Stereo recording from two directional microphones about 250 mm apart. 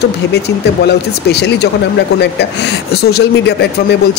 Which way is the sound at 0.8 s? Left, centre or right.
Left.